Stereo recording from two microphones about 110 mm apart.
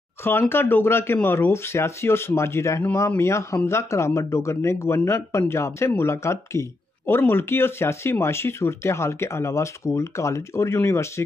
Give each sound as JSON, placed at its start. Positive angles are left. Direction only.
{"t": 0.2, "sound": "speech", "side_deg": 20}